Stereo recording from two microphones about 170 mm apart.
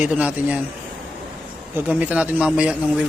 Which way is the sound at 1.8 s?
10° right (ahead or behind).